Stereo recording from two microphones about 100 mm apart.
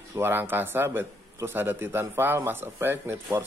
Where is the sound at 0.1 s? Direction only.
20° right (ahead or behind).